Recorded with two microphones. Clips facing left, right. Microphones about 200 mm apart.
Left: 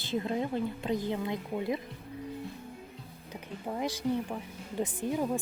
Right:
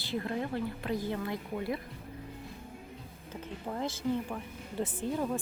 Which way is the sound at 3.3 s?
15° left (ahead or behind).